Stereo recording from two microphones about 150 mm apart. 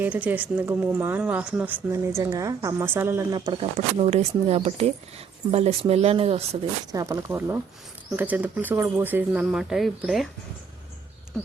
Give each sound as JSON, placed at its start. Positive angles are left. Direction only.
{"t": 0.0, "sound": "speech", "side_deg": -10}
{"t": 3.3, "sound": "speech", "side_deg": -30}
{"t": 6.9, "sound": "speech", "side_deg": -25}